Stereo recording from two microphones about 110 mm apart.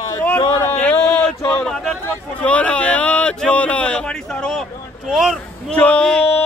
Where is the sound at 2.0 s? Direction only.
10° left (ahead or behind).